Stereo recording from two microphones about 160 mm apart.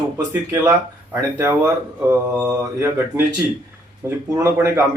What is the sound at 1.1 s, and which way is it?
Speech, 15° right (ahead or behind).